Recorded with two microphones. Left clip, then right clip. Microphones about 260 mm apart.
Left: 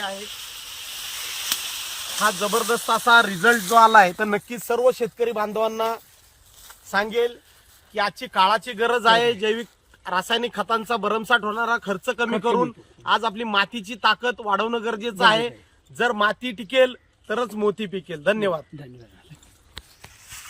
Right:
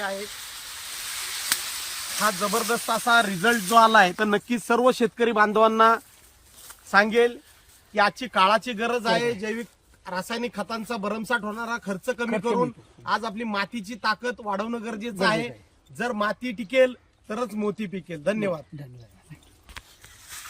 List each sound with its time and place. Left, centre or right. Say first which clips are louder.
0.0 s frying: even; centre
2.1 s speech: left 3 dB; centre